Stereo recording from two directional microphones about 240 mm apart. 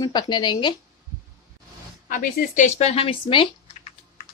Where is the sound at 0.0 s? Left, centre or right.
Centre.